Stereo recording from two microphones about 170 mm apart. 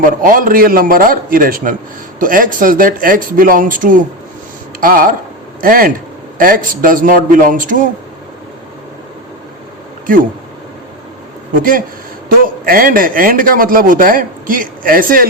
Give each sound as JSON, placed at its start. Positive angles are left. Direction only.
{"t": 0.0, "sound": "a man's voice", "side_deg": -55}
{"t": 11.5, "sound": "a man's voice", "side_deg": -55}